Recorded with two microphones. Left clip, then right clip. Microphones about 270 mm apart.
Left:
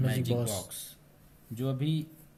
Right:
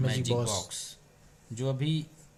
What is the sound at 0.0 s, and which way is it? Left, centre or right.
Speech, right.